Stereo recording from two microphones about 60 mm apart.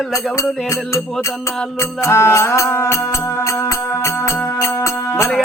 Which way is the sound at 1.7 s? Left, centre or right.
Left.